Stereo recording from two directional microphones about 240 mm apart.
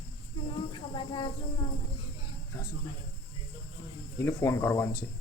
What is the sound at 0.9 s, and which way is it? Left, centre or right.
Cricket, left.